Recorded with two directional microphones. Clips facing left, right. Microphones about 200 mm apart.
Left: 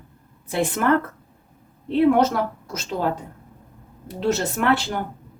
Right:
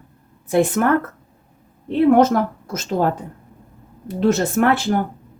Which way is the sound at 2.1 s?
50° right (ahead or behind).